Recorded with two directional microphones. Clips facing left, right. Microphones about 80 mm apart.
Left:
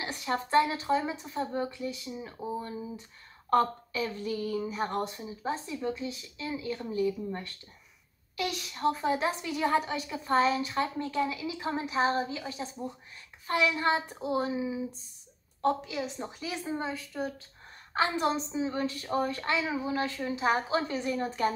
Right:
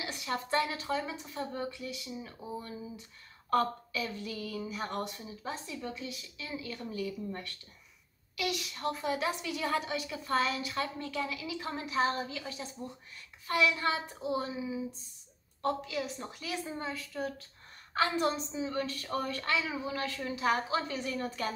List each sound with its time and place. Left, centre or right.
0.0 s speech: left